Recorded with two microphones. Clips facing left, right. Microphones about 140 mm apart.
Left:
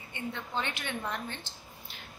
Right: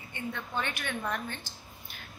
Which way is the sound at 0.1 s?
20° left (ahead or behind).